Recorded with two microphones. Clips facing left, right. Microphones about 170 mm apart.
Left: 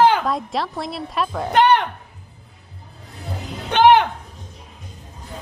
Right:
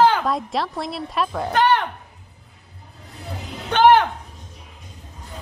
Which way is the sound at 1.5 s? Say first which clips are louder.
Left 3 dB; 20° left (ahead or behind).